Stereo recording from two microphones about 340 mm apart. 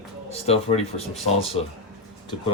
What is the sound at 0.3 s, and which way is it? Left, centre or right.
Speech, centre.